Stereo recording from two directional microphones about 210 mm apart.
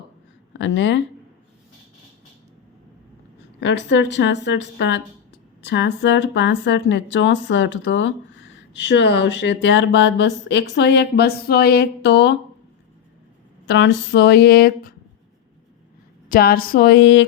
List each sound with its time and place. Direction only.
0.6 s speech: 60° left (ahead or behind)
3.6 s speech: 60° left (ahead or behind)
13.7 s speech: 55° left (ahead or behind)
16.3 s speech: 45° left (ahead or behind)